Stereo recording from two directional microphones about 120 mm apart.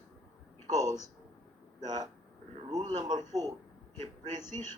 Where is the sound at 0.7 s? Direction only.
30° right (ahead or behind).